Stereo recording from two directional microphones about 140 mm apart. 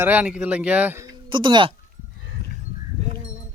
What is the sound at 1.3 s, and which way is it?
Speech, 35° right (ahead or behind).